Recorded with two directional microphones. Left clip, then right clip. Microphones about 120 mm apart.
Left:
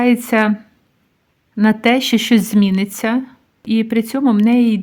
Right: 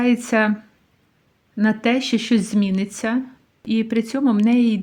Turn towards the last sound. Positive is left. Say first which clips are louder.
# left 4 dB
turn(degrees=30)  # may be behind; listen again after turning